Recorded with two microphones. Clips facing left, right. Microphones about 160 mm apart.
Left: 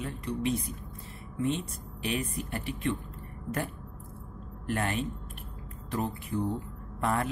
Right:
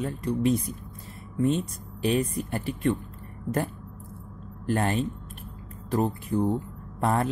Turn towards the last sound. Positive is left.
turn(degrees=-35)  # may be behind; listen again after turning